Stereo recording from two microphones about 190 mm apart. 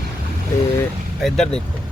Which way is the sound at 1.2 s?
Centre (ahead or behind).